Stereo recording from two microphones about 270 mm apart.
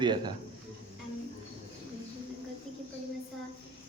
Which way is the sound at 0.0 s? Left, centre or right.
Centre.